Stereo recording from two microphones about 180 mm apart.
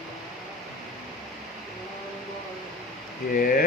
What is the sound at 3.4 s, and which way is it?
Speech, 50° left (ahead or behind).